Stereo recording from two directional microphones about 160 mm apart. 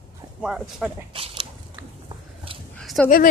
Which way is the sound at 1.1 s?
35° right (ahead or behind).